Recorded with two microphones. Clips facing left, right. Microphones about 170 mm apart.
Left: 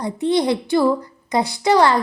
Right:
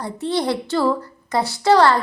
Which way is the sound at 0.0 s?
15° left (ahead or behind).